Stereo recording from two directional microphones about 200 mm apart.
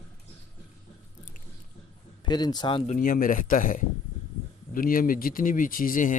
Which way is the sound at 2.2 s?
20° left (ahead or behind).